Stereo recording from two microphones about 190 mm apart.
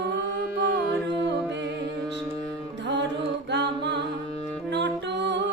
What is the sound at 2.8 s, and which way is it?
Music, 65° right (ahead or behind).